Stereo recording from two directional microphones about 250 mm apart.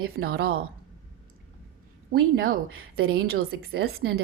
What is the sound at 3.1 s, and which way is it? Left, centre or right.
A woman's voice, right.